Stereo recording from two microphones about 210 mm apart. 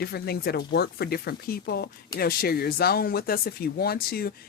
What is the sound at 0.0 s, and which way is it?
Speech, 50° left (ahead or behind).